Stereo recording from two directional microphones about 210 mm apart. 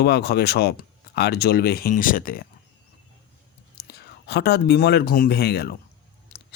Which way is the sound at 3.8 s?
50° left (ahead or behind).